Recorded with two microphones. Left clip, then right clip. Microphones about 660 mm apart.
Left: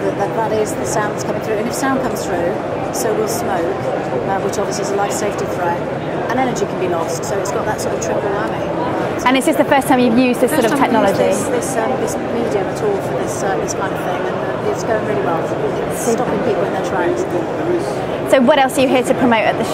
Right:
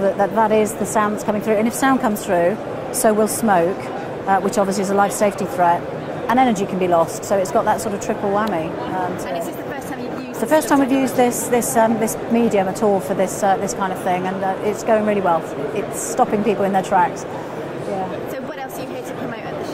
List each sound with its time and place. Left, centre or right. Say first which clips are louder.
18.3 s a woman's voice: left 16 dB; left